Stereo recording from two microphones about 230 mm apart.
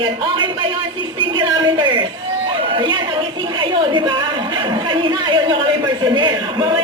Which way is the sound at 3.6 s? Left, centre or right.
Right.